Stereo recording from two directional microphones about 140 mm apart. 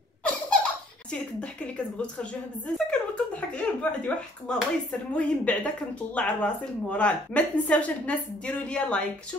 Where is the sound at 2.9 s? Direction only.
10° left (ahead or behind).